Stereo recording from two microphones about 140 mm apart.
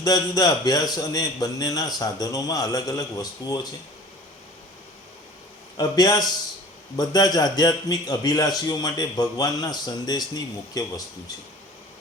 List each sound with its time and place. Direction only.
0.0 s a man's voice: 25° left (ahead or behind)
5.7 s a man's voice: 30° left (ahead or behind)